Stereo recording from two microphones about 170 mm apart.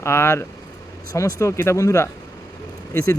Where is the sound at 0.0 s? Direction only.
15° left (ahead or behind).